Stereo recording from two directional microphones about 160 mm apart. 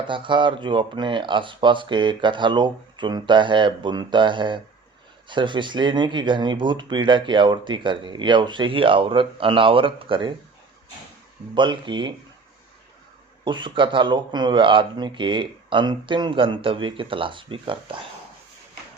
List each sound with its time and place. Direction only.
0.1 s speech: 30° right (ahead or behind)
11.5 s speech: 30° right (ahead or behind)
13.4 s speech: 30° right (ahead or behind)